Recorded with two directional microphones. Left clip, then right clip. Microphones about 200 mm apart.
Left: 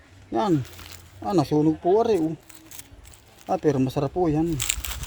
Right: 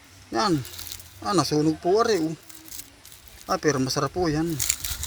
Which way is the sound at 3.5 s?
10° left (ahead or behind).